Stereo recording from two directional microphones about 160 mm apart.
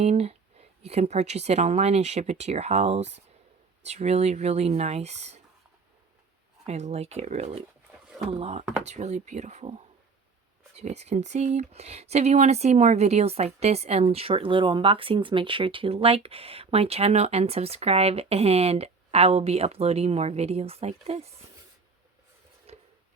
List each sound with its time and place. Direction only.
0.0 s speech: 40° right (ahead or behind)
6.7 s speech: 45° right (ahead or behind)
10.8 s speech: 45° right (ahead or behind)
22.7 s a sound: 40° right (ahead or behind)